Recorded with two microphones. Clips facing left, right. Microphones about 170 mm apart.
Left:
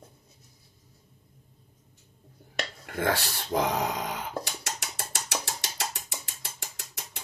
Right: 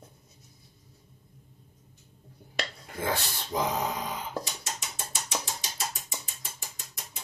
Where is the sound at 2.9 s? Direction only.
70° left (ahead or behind).